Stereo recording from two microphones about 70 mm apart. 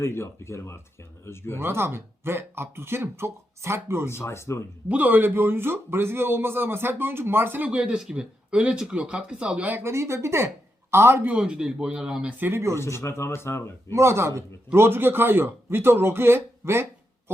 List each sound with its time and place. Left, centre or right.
0.0 s speech: left
1.5 s a man's voice: right
4.0 s speech: left
4.9 s a man's voice: right
7.7 s speech: centre
9.8 s a man's voice: right
11.3 s speech: centre
12.4 s a man's voice: right
12.7 s speech: left
13.9 s a man's voice: right